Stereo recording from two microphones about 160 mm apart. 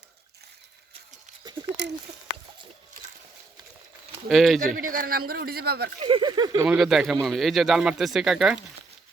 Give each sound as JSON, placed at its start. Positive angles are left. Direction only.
{"t": 4.3, "sound": "speech", "side_deg": 0}
{"t": 4.7, "sound": "a man's voice", "side_deg": -60}
{"t": 6.0, "sound": "speech", "side_deg": -30}
{"t": 6.6, "sound": "speech", "side_deg": -5}